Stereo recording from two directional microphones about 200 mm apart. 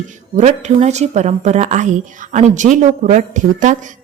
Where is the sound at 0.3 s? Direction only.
35° right (ahead or behind).